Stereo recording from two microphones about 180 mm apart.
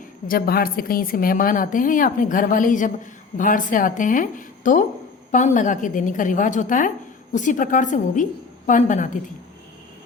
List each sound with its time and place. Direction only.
0.3 s a woman's voice: 55° left (ahead or behind)